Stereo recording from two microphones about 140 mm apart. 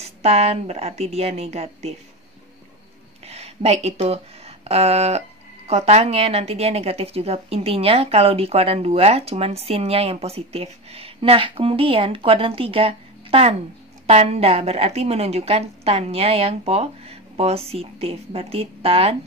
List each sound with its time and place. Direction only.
0.0 s a woman's voice: 45° right (ahead or behind)
3.3 s a woman's voice: 50° right (ahead or behind)